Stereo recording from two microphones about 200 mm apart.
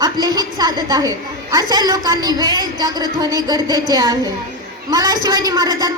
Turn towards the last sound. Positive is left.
turn(degrees=-20)  # may be behind; listen again after turning